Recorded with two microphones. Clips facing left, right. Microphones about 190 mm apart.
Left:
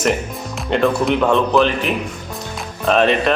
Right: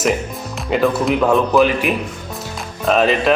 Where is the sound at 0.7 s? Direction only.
5° right (ahead or behind).